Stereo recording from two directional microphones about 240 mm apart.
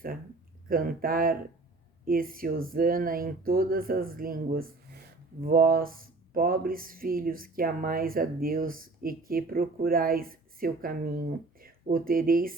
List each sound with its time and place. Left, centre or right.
0.7 s speech: right